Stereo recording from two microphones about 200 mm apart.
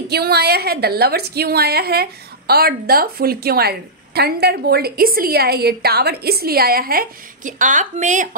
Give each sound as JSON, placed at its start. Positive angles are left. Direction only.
{"t": 0.1, "sound": "a woman's voice", "side_deg": -55}